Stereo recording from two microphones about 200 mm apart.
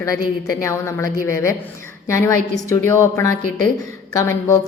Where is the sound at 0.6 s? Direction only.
15° left (ahead or behind).